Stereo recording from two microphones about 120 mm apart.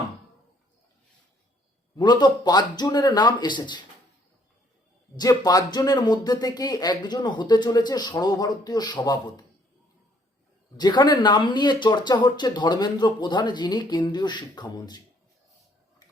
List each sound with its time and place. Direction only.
2.0 s speech: 35° left (ahead or behind)
5.1 s speech: 35° left (ahead or behind)
10.8 s speech: 35° left (ahead or behind)